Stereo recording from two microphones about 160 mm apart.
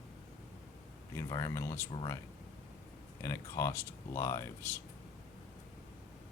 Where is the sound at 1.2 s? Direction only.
20° left (ahead or behind).